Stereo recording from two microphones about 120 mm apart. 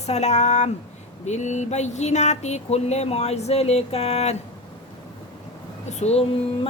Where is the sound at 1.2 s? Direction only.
75° left (ahead or behind).